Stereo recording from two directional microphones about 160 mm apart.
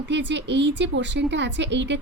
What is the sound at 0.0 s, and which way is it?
A woman's voice, 90° right.